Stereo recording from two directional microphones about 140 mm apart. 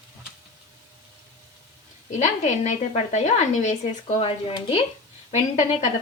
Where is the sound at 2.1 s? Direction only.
55° left (ahead or behind).